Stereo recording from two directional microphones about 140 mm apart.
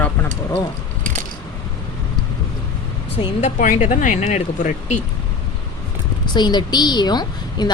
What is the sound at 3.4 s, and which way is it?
Speech, 60° left (ahead or behind).